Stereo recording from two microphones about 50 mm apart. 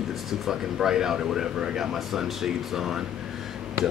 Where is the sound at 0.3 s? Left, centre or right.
Centre.